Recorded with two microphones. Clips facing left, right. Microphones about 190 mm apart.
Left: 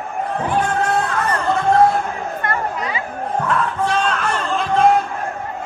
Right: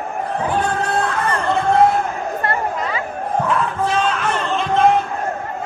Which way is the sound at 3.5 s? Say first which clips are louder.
Left 2 dB; centre (ahead or behind).